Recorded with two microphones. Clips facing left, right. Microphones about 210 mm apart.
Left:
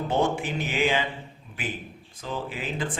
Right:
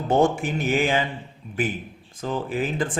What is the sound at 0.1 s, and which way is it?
Speech, 45° right (ahead or behind).